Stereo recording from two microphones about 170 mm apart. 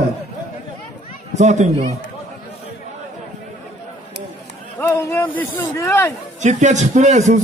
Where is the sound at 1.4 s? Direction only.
45° right (ahead or behind).